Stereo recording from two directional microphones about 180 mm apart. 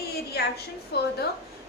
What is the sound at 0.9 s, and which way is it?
Speech, 65° left (ahead or behind).